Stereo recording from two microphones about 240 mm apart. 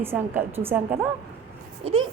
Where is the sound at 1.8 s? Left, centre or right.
Right.